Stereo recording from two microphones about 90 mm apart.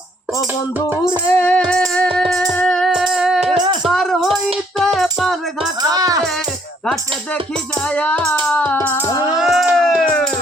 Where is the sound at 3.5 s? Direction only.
55° right (ahead or behind).